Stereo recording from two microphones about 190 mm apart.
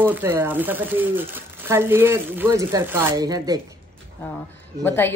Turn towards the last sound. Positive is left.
turn(degrees=10)  # may be behind; listen again after turning